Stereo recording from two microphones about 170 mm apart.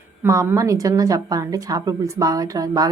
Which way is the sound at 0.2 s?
15° right (ahead or behind).